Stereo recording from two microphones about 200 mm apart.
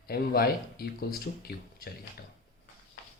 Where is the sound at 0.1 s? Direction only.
50° left (ahead or behind).